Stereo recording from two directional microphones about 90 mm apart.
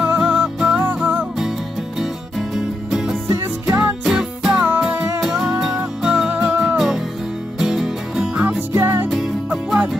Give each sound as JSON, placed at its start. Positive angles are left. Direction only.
{"t": 0.2, "sound": "music", "side_deg": -10}
{"t": 2.0, "sound": "music", "side_deg": -5}
{"t": 3.3, "sound": "music", "side_deg": -30}
{"t": 4.0, "sound": "music", "side_deg": -5}
{"t": 7.5, "sound": "music", "side_deg": -5}
{"t": 8.5, "sound": "music", "side_deg": -20}
{"t": 9.5, "sound": "music", "side_deg": -15}